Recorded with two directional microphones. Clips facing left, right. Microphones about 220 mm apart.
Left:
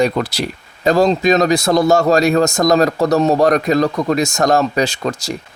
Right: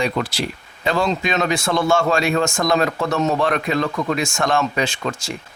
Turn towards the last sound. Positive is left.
turn(degrees=40)  # may be behind; listen again after turning